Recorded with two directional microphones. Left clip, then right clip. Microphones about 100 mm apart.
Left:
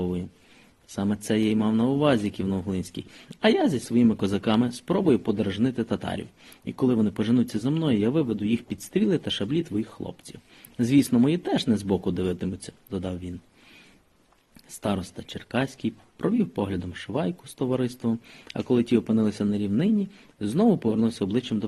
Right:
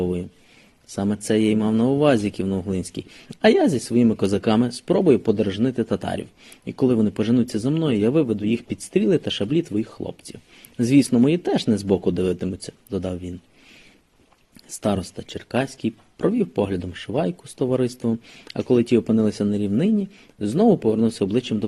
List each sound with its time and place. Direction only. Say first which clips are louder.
0.9 s speech: right 5 dB; 25° right (ahead or behind)
14.8 s speech: right 5 dB; 30° right (ahead or behind)